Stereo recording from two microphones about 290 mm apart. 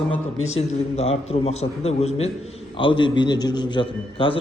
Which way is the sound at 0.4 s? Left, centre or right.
Left.